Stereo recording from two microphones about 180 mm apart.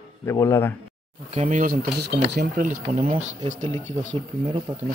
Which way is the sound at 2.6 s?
45° right (ahead or behind).